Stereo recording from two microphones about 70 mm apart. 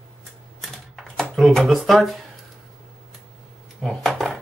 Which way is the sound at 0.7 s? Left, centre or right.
Centre.